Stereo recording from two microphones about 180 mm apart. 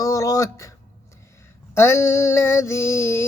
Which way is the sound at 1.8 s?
15° left (ahead or behind).